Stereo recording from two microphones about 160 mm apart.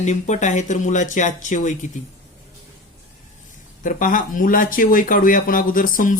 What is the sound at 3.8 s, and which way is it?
Speech, 55° left (ahead or behind).